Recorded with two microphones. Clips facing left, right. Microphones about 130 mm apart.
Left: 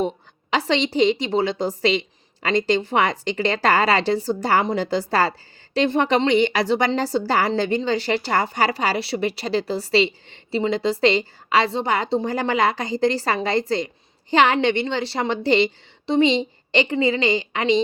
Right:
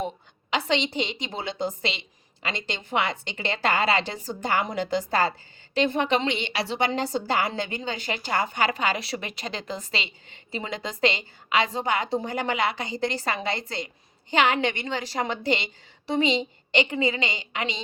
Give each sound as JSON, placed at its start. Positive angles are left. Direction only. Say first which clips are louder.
{"t": 0.5, "sound": "a woman's voice", "louder": "left 5 dB", "side_deg": 35}